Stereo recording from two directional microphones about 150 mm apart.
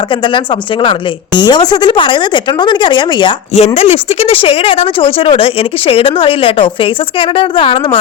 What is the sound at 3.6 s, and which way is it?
Speech, 45° left (ahead or behind).